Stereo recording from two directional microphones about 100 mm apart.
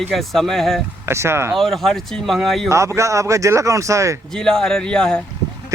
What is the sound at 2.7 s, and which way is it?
Speech, 30° right (ahead or behind).